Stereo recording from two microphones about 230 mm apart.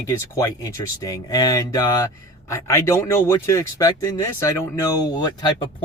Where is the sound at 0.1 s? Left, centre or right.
Centre.